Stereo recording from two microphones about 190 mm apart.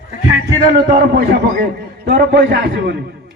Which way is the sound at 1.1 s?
55° right (ahead or behind).